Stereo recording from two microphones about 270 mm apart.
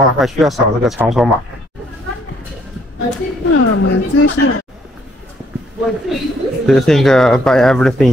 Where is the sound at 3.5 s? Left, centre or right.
Left.